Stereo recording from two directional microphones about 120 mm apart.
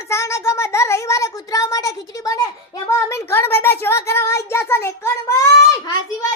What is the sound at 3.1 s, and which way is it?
A child's voice, 20° left (ahead or behind).